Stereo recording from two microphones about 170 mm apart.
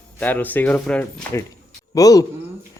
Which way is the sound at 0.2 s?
10° left (ahead or behind).